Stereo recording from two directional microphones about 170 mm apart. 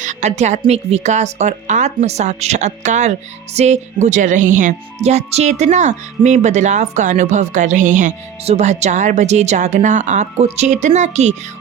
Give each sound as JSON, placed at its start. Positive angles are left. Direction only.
{"t": 0.0, "sound": "a woman's voice", "side_deg": -45}